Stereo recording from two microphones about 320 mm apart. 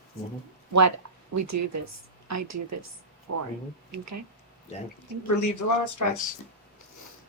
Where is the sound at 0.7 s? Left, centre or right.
Right.